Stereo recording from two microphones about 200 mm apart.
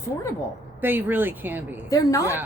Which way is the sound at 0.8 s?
10° right (ahead or behind).